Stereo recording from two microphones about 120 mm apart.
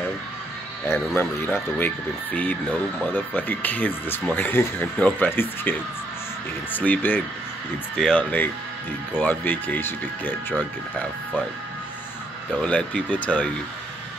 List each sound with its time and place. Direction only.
0.8 s speech: 20° left (ahead or behind)
12.5 s speech: 10° left (ahead or behind)